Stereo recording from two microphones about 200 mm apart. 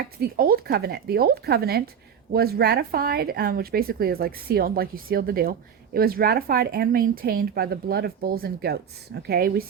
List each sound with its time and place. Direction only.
0.2 s a woman's voice: 50° right (ahead or behind)